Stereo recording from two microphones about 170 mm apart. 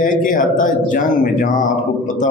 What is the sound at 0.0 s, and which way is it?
A man's voice, 50° left (ahead or behind).